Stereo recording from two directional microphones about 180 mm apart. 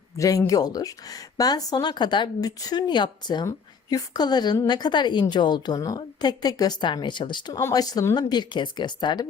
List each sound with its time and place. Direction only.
0.2 s speech: 20° left (ahead or behind)